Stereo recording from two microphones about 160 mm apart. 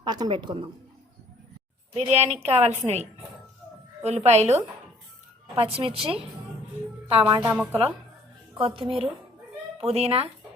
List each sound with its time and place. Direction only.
0.0 s a woman's voice: 25° right (ahead or behind)
1.9 s a woman's voice: 45° right (ahead or behind)
5.5 s a woman's voice: 35° right (ahead or behind)
7.5 s a woman's voice: 10° right (ahead or behind)
8.5 s a woman's voice: 35° right (ahead or behind)